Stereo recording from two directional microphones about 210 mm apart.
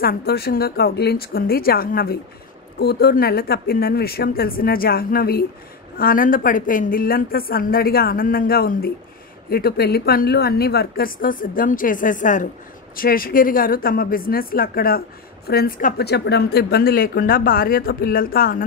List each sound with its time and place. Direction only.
0.0 s a woman's voice: 45° left (ahead or behind)